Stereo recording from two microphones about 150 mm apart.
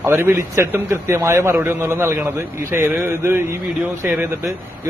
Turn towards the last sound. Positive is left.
turn(degrees=-15)  # may be behind; listen again after turning